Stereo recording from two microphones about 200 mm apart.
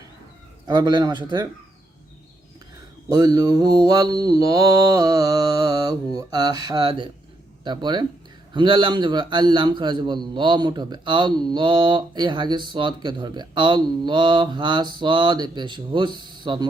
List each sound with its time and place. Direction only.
0.7 s a man's voice: 20° right (ahead or behind)
3.1 s a man's voice: 20° right (ahead or behind)